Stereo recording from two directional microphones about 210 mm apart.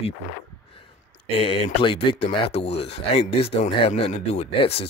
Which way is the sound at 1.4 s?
25° left (ahead or behind).